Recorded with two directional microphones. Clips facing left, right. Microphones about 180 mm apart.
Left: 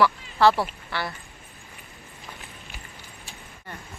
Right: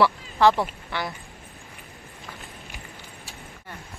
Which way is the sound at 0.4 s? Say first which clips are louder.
Even; 15° right (ahead or behind).